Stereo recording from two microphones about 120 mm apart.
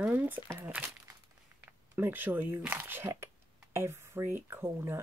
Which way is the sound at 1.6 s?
15° right (ahead or behind).